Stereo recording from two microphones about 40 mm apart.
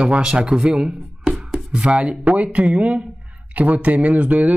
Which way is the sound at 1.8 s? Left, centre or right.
Right.